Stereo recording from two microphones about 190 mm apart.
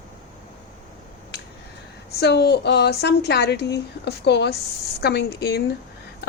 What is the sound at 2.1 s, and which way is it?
Speech, 60° left (ahead or behind).